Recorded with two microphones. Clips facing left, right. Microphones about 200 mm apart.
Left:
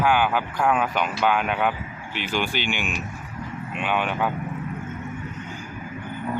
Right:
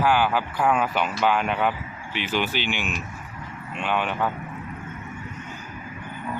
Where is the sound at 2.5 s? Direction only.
50° left (ahead or behind).